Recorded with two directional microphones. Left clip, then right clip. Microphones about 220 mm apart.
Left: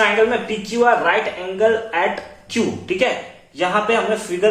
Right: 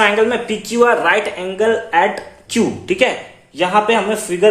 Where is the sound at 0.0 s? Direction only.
50° right (ahead or behind).